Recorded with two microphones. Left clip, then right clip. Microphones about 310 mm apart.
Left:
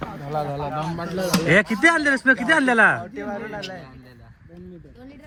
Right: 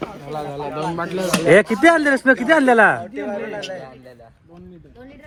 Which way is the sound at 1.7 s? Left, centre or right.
Centre.